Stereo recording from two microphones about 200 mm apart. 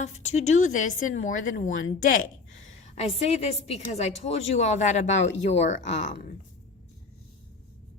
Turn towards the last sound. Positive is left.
turn(degrees=40)  # may be behind; listen again after turning